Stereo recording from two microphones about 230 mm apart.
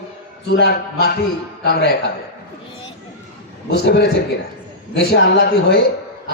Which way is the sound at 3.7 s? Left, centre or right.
Left.